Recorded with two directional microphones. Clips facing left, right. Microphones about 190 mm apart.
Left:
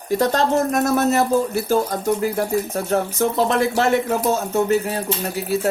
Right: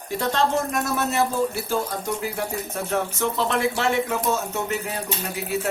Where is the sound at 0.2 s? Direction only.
40° left (ahead or behind).